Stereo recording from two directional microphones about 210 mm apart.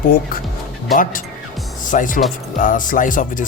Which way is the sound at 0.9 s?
40° left (ahead or behind).